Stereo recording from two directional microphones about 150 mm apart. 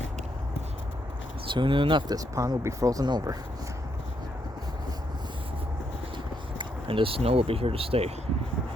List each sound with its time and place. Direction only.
1.5 s speech: 35° right (ahead or behind)
6.6 s speech: 35° right (ahead or behind)